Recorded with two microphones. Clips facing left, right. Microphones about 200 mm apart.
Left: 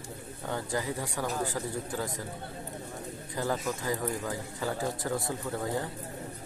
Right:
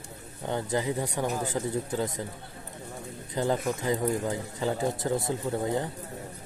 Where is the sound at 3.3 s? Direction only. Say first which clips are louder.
Right 4 dB; 20° right (ahead or behind).